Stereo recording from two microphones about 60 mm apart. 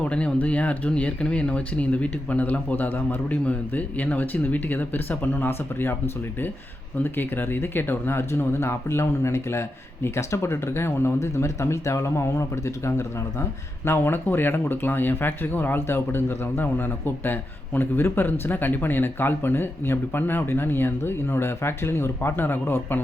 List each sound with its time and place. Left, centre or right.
0.0 s speech: centre; by 6.0 s left
7.0 s speech: left
13.8 s speech: left